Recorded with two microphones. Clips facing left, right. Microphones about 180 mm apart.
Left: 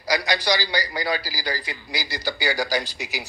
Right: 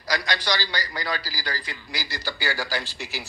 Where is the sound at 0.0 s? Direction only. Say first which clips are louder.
Left 4 dB; 10° left (ahead or behind).